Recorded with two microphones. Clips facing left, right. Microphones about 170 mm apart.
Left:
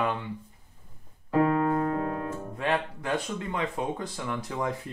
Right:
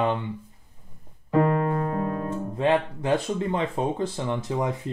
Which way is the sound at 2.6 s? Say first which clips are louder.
Right 6 dB; 20° right (ahead or behind).